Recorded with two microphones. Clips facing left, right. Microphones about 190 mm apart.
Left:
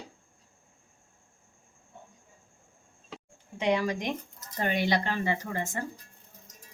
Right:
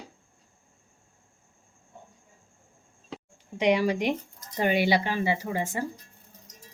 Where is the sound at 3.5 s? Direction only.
15° right (ahead or behind).